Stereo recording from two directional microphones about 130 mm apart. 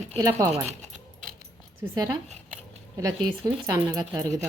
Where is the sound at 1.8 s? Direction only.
20° right (ahead or behind).